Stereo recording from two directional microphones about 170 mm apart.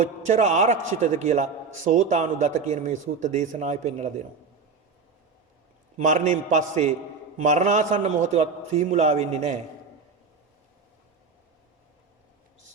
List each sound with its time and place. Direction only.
0.0 s a man's voice: 45° right (ahead or behind)
6.0 s a man's voice: 45° right (ahead or behind)